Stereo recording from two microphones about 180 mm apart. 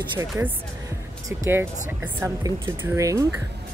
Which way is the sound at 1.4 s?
15° right (ahead or behind).